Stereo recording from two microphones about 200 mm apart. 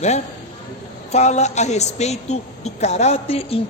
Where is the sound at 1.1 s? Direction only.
35° left (ahead or behind).